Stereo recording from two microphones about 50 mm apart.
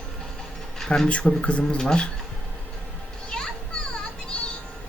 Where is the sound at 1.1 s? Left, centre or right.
Left.